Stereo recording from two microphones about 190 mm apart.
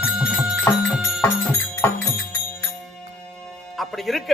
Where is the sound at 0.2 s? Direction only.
5° right (ahead or behind).